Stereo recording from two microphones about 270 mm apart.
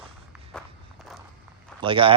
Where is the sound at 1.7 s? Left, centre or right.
Centre.